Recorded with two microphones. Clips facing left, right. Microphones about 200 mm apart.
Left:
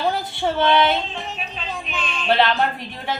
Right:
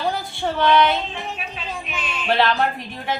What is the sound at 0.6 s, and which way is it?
Music, 25° left (ahead or behind).